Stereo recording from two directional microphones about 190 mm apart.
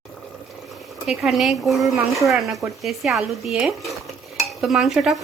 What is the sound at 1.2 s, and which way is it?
A woman's voice, centre (ahead or behind).